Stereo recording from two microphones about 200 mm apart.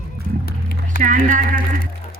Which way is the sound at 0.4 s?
50° left (ahead or behind).